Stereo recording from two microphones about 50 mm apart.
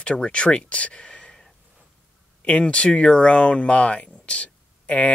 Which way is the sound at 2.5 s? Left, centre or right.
Left.